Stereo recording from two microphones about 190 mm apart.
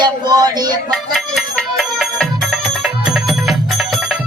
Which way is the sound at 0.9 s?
Centre (ahead or behind).